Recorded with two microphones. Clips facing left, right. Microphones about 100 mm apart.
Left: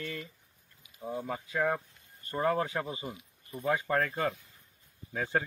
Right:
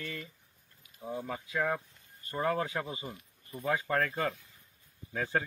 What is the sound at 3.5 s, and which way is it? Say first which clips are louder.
Speech: left 2 dB; 30° left (ahead or behind).